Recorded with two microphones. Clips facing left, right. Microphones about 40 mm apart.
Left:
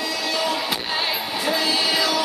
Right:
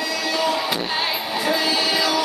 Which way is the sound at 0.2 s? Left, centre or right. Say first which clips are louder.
Right 2 dB; centre.